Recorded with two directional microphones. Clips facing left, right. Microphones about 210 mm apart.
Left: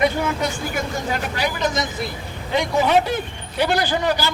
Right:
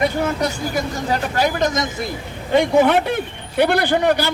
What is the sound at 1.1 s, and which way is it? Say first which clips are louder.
A man's voice: right 8 dB; 45° right (ahead or behind).